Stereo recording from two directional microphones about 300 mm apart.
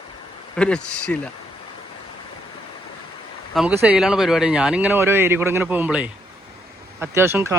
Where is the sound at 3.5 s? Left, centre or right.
Centre.